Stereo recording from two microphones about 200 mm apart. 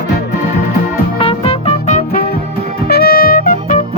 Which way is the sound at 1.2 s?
30° left (ahead or behind).